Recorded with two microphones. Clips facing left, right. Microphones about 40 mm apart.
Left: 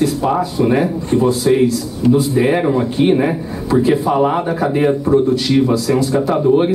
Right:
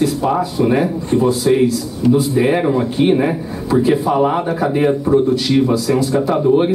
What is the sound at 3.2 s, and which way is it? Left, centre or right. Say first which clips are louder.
Speech: even; centre.